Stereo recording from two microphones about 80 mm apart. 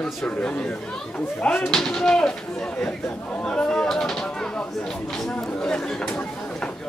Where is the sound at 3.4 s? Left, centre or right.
Centre.